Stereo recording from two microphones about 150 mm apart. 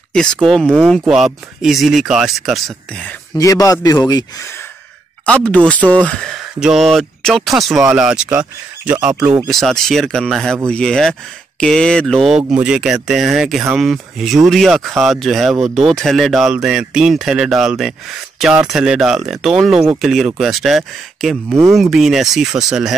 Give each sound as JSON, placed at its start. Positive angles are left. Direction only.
{"t": 0.1, "sound": "speech", "side_deg": 5}
{"t": 3.3, "sound": "a man's voice", "side_deg": 20}
{"t": 5.2, "sound": "speech", "side_deg": 10}
{"t": 9.5, "sound": "speech", "side_deg": 0}